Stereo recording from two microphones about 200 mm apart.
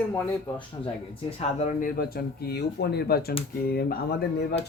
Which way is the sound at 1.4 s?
35° left (ahead or behind).